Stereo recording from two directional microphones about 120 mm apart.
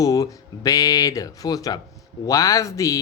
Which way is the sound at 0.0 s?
30° left (ahead or behind).